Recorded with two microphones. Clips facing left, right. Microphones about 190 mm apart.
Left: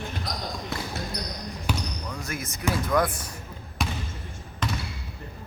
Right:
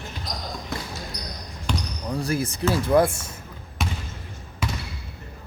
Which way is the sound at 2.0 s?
35° right (ahead or behind).